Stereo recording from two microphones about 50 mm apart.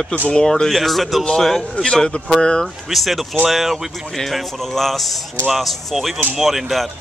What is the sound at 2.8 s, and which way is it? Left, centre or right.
Speech, centre.